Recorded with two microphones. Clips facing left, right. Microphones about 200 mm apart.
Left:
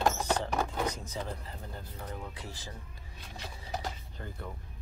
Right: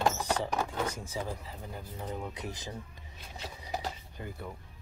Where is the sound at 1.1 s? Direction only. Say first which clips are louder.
Right 1 dB; 10° right (ahead or behind).